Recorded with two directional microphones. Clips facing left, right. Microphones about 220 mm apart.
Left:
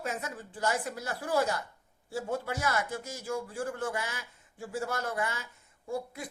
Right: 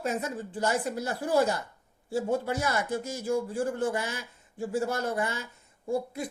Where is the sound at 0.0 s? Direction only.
30° right (ahead or behind).